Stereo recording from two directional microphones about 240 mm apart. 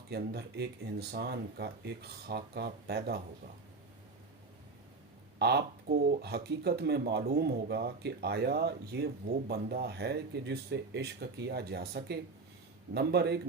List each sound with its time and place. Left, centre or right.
0.1 s speech: right
5.4 s speech: right